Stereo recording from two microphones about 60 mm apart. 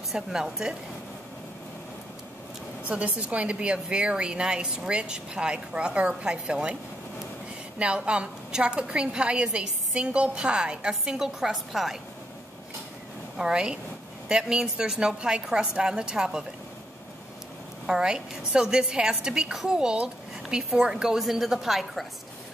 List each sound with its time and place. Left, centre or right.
0.1 s a woman's voice: centre
2.9 s a woman's voice: right
7.8 s a woman's voice: centre
13.4 s a woman's voice: centre
17.8 s a woman's voice: centre